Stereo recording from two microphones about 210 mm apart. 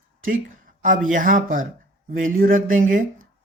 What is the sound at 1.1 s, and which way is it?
Speech, 40° right (ahead or behind).